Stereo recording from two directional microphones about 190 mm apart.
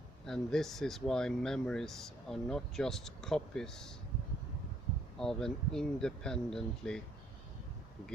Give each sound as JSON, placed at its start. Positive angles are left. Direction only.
{"t": 0.3, "sound": "speech", "side_deg": 0}
{"t": 5.2, "sound": "speech", "side_deg": 5}